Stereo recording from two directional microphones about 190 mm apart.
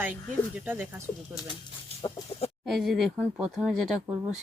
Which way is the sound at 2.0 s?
30° left (ahead or behind).